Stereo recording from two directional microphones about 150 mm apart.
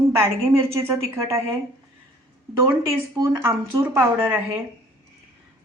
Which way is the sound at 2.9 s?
20° right (ahead or behind).